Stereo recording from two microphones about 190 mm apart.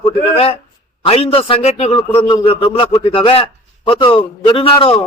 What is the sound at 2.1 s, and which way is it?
A man's voice, 20° left (ahead or behind).